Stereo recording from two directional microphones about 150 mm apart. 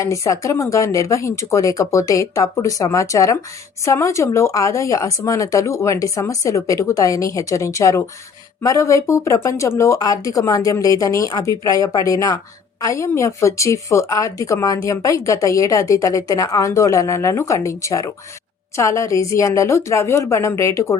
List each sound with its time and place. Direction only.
0.0 s speech: 20° left (ahead or behind)